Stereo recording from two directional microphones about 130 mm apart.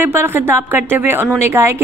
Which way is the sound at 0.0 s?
20° right (ahead or behind).